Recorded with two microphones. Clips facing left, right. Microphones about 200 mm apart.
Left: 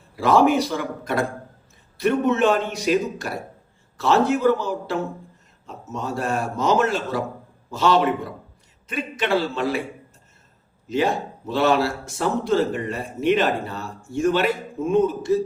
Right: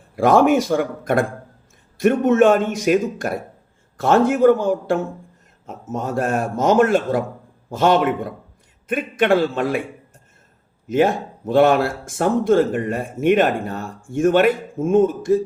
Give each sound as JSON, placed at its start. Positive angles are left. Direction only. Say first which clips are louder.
{"t": 0.2, "sound": "speech", "louder": "right 3 dB", "side_deg": -50}
{"t": 10.8, "sound": "speech", "louder": "right 5 dB", "side_deg": -50}